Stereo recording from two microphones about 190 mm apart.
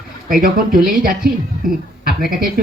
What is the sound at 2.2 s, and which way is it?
Speech, 50° right (ahead or behind).